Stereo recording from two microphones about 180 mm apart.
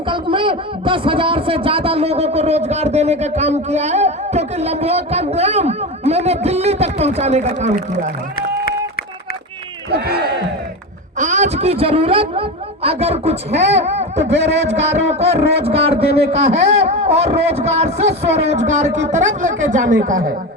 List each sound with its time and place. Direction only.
0.1 s a man's voice: 25° right (ahead or behind); by 8.1 s 45° right (ahead or behind)
9.9 s speech: 60° right (ahead or behind)
11.2 s a man's voice: 40° right (ahead or behind)
14.3 s a man's voice: 70° right (ahead or behind)
15.2 s a man's voice: 35° right (ahead or behind)